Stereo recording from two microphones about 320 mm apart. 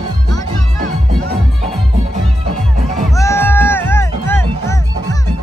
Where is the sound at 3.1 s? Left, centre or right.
Centre.